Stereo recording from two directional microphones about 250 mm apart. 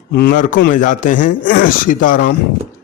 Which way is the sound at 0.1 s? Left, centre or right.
Left.